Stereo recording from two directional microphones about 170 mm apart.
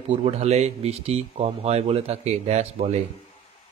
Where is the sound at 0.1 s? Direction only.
40° right (ahead or behind).